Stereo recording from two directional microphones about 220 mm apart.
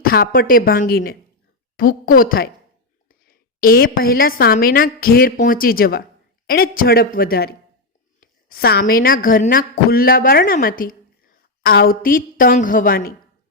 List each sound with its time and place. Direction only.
0.0 s a woman's voice: 40° left (ahead or behind)